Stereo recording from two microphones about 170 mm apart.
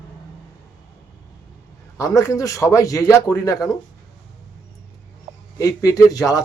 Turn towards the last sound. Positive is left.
turn(degrees=20)  # may be behind; listen again after turning